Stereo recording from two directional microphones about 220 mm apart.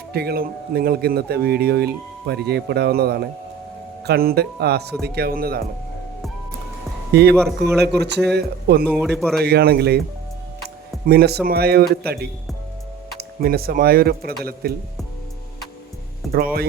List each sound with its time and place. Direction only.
0.1 s a man's voice: 45° right (ahead or behind)
7.1 s a man's voice: 50° right (ahead or behind)
9.0 s speech: centre (ahead or behind)
9.4 s a man's voice: 45° right (ahead or behind)
11.0 s a man's voice: 45° right (ahead or behind)
16.2 s music: centre (ahead or behind)